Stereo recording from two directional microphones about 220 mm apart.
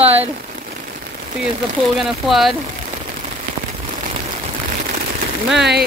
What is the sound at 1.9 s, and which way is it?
Speech, centre (ahead or behind).